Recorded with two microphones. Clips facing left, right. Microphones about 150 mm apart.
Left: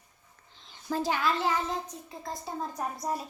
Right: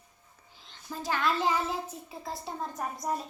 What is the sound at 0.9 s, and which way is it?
Speech, 90° left.